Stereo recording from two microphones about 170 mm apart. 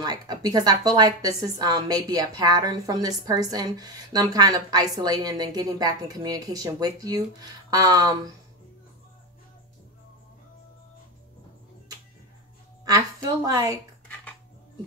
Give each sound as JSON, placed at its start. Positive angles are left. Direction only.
{"t": 0.0, "sound": "a woman's voice", "side_deg": -25}
{"t": 12.8, "sound": "a woman's voice", "side_deg": -20}